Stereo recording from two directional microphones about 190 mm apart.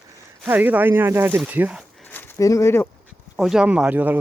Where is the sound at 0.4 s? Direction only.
10° right (ahead or behind).